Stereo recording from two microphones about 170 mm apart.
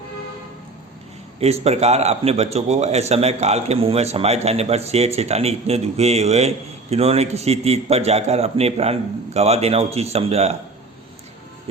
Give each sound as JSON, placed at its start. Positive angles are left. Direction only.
{"t": 1.4, "sound": "a man's voice", "side_deg": -35}